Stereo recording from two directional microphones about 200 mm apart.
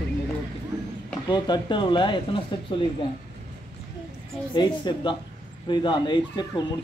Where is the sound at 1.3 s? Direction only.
25° left (ahead or behind).